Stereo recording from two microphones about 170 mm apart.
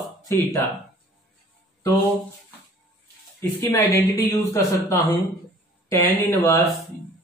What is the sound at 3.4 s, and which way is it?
Speech, 15° left (ahead or behind).